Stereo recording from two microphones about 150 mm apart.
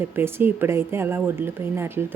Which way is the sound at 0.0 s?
15° right (ahead or behind).